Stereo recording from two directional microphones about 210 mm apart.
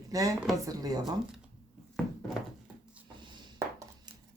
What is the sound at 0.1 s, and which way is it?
A woman's voice, 15° right (ahead or behind).